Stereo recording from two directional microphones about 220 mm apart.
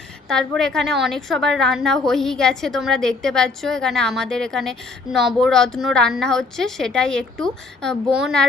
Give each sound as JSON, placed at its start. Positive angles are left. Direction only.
{"t": 0.3, "sound": "a woman's voice", "side_deg": 0}